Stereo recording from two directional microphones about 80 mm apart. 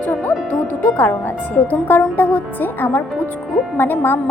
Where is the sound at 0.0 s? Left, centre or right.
Left.